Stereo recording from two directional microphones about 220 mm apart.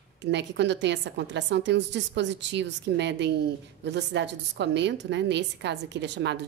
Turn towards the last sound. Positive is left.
turn(degrees=-50)  # may be behind; listen again after turning